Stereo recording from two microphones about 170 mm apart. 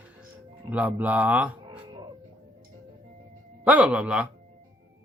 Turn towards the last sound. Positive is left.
turn(degrees=-5)  # may be behind; listen again after turning